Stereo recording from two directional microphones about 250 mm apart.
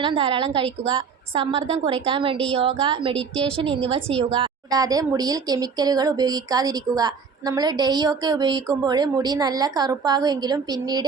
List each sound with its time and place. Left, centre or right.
0.0 s a woman's voice: right